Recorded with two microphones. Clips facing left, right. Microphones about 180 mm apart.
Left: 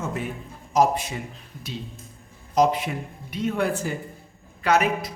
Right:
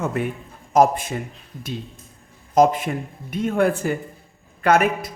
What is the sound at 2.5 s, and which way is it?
A man's voice, 50° right (ahead or behind).